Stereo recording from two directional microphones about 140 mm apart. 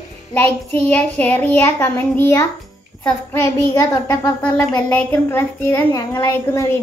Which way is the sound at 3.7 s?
20° left (ahead or behind).